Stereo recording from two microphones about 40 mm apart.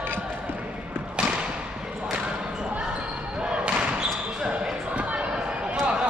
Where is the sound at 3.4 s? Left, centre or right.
Right.